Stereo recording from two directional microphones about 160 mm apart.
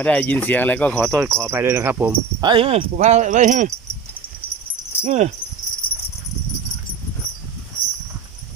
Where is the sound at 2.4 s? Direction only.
30° right (ahead or behind); by 3.7 s 50° right (ahead or behind).